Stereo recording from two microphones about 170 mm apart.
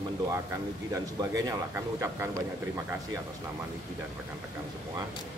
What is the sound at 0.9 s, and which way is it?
Speech, 20° right (ahead or behind).